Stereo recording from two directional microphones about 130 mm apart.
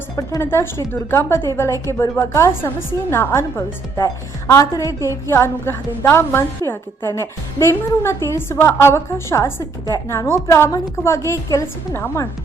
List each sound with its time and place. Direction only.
0.2 s a woman's voice: 25° left (ahead or behind)